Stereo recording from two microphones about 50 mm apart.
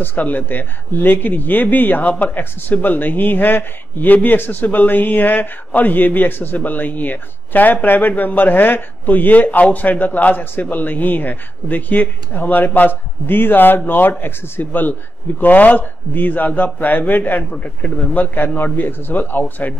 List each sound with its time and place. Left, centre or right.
0.0 s speech: left